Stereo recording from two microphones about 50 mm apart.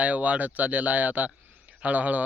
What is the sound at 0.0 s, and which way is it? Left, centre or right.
Speech, right.